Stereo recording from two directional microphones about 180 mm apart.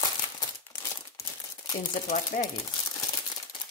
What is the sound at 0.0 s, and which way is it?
Crumpling, 20° left (ahead or behind).